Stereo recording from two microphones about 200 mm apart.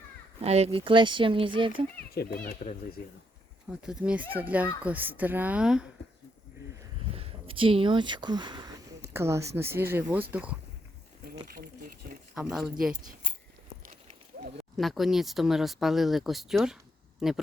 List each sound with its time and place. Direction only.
0.4 s speech: 30° right (ahead or behind)
2.1 s speech: 45° left (ahead or behind)
3.7 s a woman's voice: 5° right (ahead or behind)
7.1 s a woman's voice: 30° right (ahead or behind); by 10.6 s 5° right (ahead or behind)
11.4 s a sound: 50° right (ahead or behind)
12.3 s speech: 5° right (ahead or behind)
13.8 s a sound: 40° right (ahead or behind)
14.6 s speech: centre (ahead or behind)